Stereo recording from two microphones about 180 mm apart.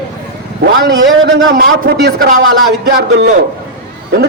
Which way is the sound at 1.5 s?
60° right (ahead or behind).